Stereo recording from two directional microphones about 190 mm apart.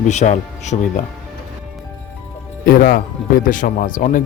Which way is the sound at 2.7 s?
50° left (ahead or behind).